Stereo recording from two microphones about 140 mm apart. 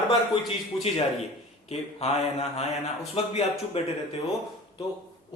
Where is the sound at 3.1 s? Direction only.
45° left (ahead or behind).